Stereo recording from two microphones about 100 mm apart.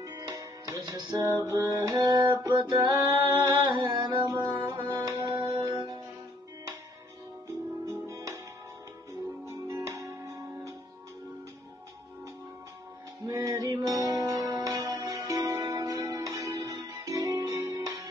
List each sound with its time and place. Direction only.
0.0 s music: 40° right (ahead or behind)
7.8 s music: 30° right (ahead or behind)
9.5 s music: 30° right (ahead or behind)
13.3 s music: 35° right (ahead or behind)